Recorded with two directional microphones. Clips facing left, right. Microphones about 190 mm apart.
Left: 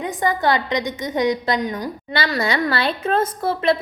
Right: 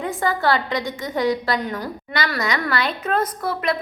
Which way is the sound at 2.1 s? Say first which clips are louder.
Left 3 dB; 30° left (ahead or behind).